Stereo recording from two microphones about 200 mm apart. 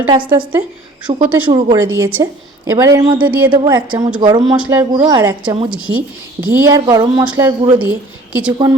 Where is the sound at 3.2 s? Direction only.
10° right (ahead or behind).